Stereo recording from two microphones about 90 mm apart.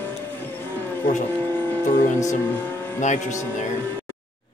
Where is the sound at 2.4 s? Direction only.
20° left (ahead or behind).